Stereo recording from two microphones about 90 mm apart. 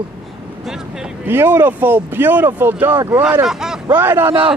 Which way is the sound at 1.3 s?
25° right (ahead or behind).